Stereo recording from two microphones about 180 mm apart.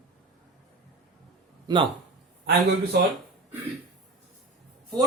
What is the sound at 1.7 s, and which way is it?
Speech, 20° right (ahead or behind).